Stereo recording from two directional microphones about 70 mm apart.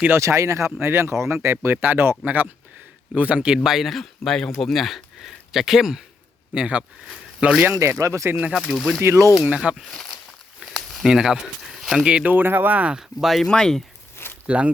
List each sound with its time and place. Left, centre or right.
0.2 s speech: right; by 6.0 s centre
6.5 s speech: centre
7.7 s speech: right
8.7 s speech: centre
9.0 s speech: right
9.9 s speech: centre
11.0 s speech: centre
12.0 s speech: centre
13.1 s speech: centre
14.4 s speech: centre